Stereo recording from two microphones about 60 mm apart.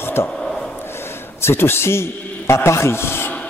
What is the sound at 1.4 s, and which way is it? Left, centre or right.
A man's voice, left.